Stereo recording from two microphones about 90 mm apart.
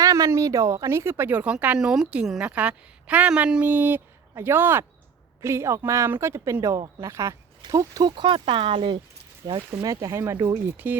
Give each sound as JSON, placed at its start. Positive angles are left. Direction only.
{"t": 0.0, "sound": "speech", "side_deg": -40}
{"t": 1.8, "sound": "a woman's voice", "side_deg": -5}
{"t": 7.6, "sound": "speech", "side_deg": -45}
{"t": 8.1, "sound": "speech", "side_deg": -65}
{"t": 9.5, "sound": "a woman's voice", "side_deg": -45}